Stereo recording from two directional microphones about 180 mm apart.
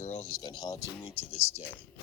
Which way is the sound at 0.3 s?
20° left (ahead or behind).